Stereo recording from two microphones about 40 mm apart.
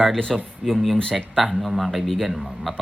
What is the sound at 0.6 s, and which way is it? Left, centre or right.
Speech, centre.